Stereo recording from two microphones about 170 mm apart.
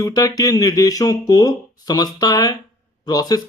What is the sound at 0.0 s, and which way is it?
Speech, 20° left (ahead or behind).